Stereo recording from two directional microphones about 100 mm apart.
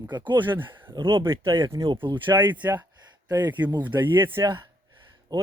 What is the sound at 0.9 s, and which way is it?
Speech, 60° right (ahead or behind).